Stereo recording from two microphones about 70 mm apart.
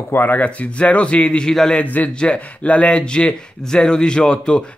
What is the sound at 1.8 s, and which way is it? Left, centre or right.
Speech, left.